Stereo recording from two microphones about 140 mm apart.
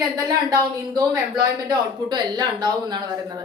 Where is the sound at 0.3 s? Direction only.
25° right (ahead or behind).